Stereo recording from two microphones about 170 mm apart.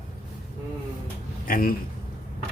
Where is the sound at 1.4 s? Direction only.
55° left (ahead or behind).